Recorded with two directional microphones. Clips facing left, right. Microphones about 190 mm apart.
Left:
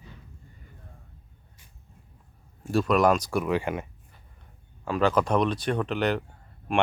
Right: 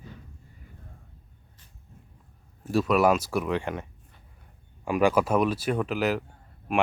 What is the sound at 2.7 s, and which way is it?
Speech, 5° right (ahead or behind).